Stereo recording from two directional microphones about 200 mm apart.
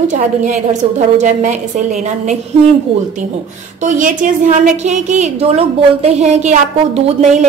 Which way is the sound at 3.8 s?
40° right (ahead or behind).